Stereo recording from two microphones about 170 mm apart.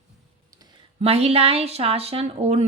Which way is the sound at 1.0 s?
35° right (ahead or behind).